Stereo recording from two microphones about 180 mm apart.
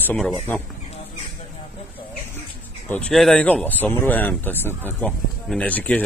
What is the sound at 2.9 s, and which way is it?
Speech, 5° left (ahead or behind).